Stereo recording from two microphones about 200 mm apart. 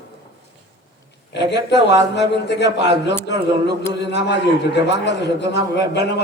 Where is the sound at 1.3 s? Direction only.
60° left (ahead or behind).